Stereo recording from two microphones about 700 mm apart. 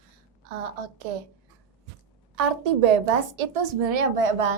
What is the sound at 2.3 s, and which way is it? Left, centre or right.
A child's voice, right.